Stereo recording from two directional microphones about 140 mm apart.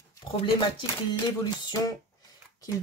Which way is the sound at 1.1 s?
25° left (ahead or behind).